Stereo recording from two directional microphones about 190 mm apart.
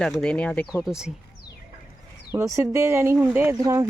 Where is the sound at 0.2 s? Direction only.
5° left (ahead or behind).